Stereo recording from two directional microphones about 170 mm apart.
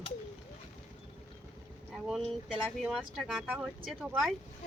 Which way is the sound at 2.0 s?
Centre (ahead or behind).